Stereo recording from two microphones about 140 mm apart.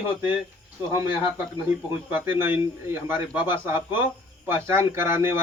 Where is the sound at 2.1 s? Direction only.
15° right (ahead or behind).